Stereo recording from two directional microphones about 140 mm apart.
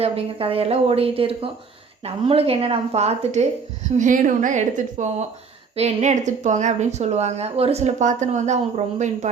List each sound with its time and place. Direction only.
0.0 s speech: 45° right (ahead or behind)
3.9 s a woman's voice: 65° right (ahead or behind)
5.7 s a woman's voice: 50° right (ahead or behind)